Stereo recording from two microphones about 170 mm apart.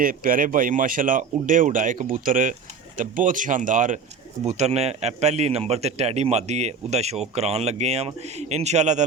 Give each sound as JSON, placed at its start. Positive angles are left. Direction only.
{"t": 0.0, "sound": "a man's voice", "side_deg": -55}